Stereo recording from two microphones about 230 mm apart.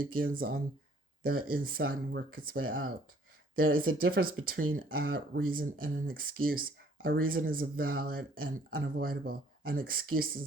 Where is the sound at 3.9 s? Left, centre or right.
Right.